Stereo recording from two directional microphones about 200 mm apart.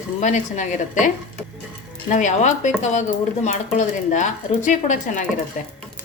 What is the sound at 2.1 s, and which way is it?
Speech, 40° left (ahead or behind).